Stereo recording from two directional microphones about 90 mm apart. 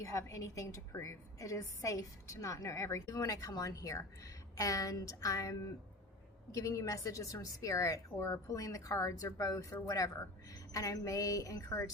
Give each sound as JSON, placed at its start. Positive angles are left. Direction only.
{"t": 0.0, "sound": "a woman's voice", "side_deg": 35}